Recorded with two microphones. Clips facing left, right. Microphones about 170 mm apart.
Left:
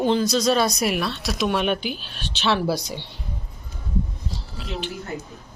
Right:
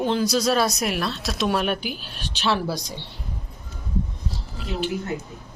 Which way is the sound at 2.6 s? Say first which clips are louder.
Left 4 dB; 5° left (ahead or behind).